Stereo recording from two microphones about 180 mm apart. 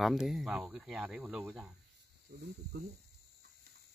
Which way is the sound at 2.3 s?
50° right (ahead or behind).